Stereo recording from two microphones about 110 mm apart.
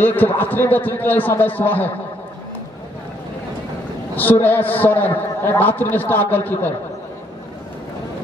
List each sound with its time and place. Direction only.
0.0 s a man's voice: 15° left (ahead or behind)
4.1 s a man's voice: 15° left (ahead or behind)